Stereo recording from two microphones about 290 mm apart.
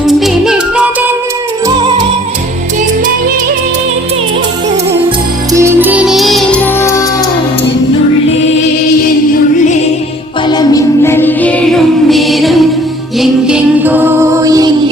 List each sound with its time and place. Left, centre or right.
0.0 s music: centre
1.6 s music: centre
5.0 s music: centre
10.5 s music: centre